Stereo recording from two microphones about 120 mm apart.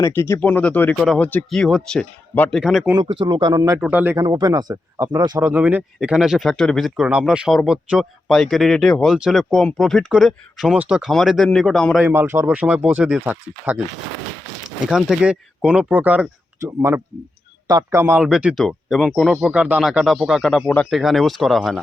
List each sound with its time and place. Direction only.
0.0 s speech: 20° left (ahead or behind)
0.9 s speech: centre (ahead or behind)
1.2 s speech: 10° left (ahead or behind)
1.5 s speech: centre (ahead or behind)
3.0 s a man's voice: 45° right (ahead or behind)
3.8 s speech: 15° right (ahead or behind)
4.2 s a man's voice: 30° right (ahead or behind)
5.4 s speech: 15° right (ahead or behind); by 9.1 s 5° left (ahead or behind)
9.1 s speech: 5° right (ahead or behind)
9.4 s speech: 5° left (ahead or behind)
12.0 s a man's voice: 20° right (ahead or behind)
15.1 s speech: 5° right (ahead or behind)
16.6 s a man's voice: 25° right (ahead or behind)
18.2 s speech: 10° right (ahead or behind)